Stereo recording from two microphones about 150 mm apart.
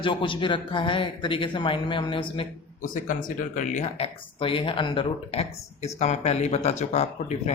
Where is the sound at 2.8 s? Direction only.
60° left (ahead or behind).